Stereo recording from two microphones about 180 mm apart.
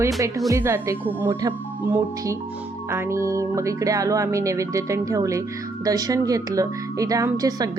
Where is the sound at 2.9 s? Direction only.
15° right (ahead or behind).